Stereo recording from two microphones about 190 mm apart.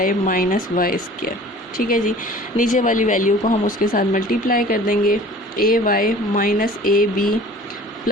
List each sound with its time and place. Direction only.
0.0 s speech: 45° left (ahead or behind)